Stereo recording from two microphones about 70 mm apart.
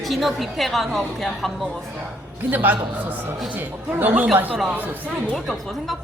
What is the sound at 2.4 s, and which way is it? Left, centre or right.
A man's voice, right.